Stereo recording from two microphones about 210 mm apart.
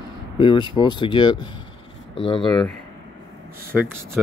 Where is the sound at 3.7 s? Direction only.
Centre (ahead or behind).